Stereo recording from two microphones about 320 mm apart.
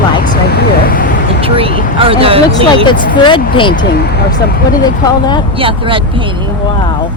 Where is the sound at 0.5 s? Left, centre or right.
Left.